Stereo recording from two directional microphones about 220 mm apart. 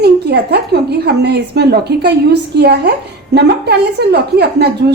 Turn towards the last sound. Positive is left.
turn(degrees=-50)  # may be behind; listen again after turning